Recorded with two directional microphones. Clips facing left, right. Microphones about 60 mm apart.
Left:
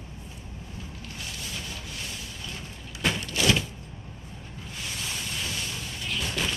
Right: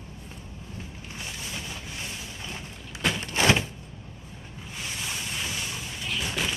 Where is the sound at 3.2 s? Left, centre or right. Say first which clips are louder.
Right 4 dB; right.